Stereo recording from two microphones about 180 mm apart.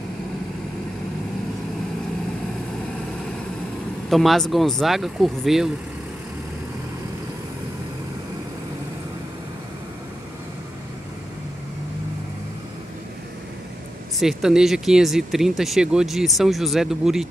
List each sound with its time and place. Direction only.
4.1 s speech: centre (ahead or behind)
14.2 s speech: 5° right (ahead or behind)